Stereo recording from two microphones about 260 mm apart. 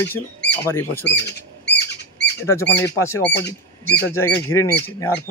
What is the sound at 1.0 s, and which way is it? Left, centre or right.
Bird, left.